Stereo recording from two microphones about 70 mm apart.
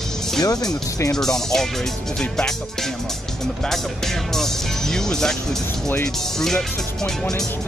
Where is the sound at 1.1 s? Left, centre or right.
Centre.